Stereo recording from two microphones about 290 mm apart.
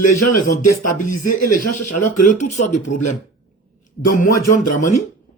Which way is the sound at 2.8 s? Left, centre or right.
Left.